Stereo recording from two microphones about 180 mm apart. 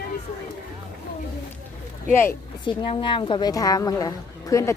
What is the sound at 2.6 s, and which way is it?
A woman's voice, 25° left (ahead or behind).